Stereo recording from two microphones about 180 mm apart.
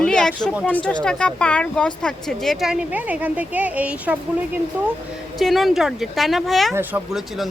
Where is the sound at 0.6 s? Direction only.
5° left (ahead or behind).